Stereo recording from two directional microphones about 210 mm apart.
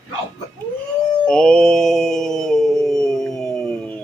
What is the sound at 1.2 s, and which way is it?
Mantra, 5° left (ahead or behind).